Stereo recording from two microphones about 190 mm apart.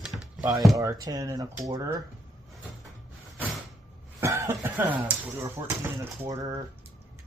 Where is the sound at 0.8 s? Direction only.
20° right (ahead or behind).